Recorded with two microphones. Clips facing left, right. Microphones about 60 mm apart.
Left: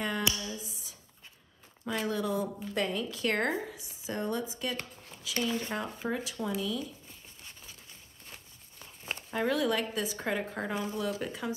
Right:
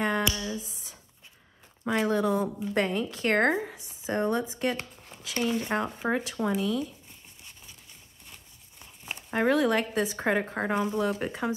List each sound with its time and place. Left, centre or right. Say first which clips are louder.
0.0 s a sound: right 5 dB; right
1.9 s speech: right 6 dB; right
2.7 s a woman's voice: right 5 dB; right
5.3 s speech: right 4 dB; right
5.8 s a woman's voice: right 6 dB; right
8.7 s a sound: even; centre
9.3 s speech: right 5 dB; right